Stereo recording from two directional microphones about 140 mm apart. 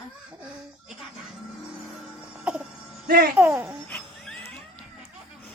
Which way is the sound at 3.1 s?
90° right.